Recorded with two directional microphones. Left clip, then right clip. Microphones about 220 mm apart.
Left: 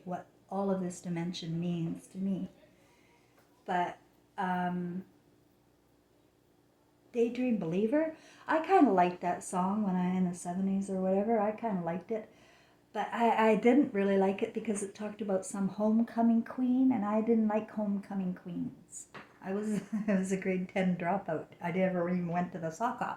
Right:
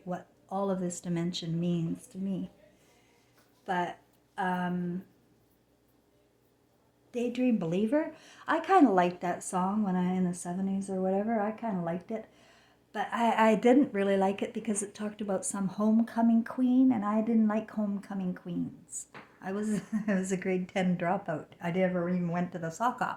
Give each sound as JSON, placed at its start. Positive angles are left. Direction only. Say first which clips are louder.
{"t": 0.1, "sound": "speech", "louder": "right 3 dB", "side_deg": -40}
{"t": 3.7, "sound": "a woman's voice", "louder": "even", "side_deg": -40}
{"t": 7.1, "sound": "a woman's voice", "louder": "even", "side_deg": -45}